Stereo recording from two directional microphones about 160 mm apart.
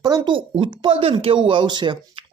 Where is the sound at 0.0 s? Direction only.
25° right (ahead or behind).